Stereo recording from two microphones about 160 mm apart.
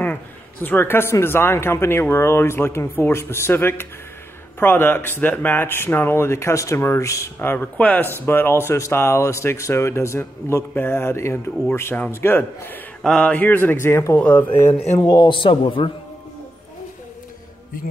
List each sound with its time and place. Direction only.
0.0 s speech: 10° left (ahead or behind)
14.7 s a man's voice: 40° left (ahead or behind)
15.0 s speech: 20° left (ahead or behind)
15.3 s a man's voice: 35° left (ahead or behind)